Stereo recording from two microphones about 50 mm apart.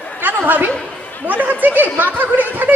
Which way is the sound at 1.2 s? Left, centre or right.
Right.